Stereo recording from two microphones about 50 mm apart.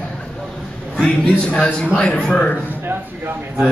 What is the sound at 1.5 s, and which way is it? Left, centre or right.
Speech, left.